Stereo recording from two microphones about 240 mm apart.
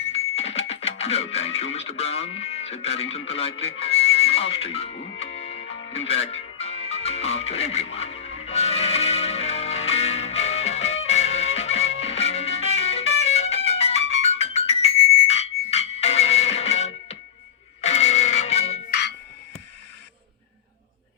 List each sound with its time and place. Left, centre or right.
0.1 s music: left
18.9 s music: left